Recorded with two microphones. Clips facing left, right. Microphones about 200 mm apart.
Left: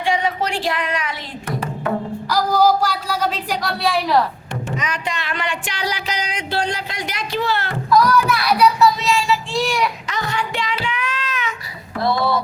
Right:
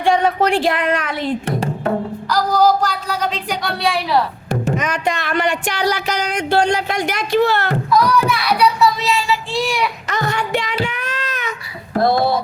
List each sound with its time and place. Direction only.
0.0 s speech: 55° right (ahead or behind)
1.5 s music: 30° right (ahead or behind)
2.3 s a woman's voice: 10° left (ahead or behind)
4.8 s speech: 50° right (ahead or behind)
6.1 s speech: 60° right (ahead or behind)
7.9 s child singing: centre (ahead or behind)
10.1 s child singing: 45° right (ahead or behind)
11.9 s speech: 45° right (ahead or behind)